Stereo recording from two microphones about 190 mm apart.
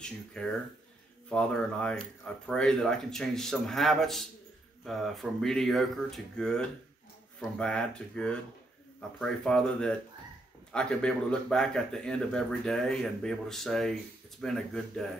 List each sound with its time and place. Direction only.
0.0 s speech: 5° left (ahead or behind)